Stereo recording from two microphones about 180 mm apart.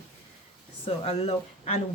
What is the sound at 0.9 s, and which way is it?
Speech, 35° left (ahead or behind).